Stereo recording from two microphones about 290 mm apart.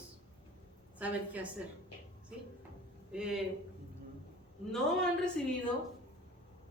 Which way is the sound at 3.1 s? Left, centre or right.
Centre.